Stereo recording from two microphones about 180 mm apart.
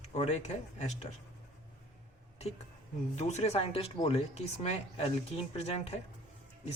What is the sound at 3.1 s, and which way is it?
Speech, 40° left (ahead or behind).